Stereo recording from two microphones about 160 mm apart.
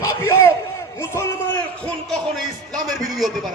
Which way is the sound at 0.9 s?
15° left (ahead or behind).